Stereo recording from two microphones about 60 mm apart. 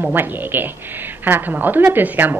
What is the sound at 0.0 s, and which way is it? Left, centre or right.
A woman's voice, right.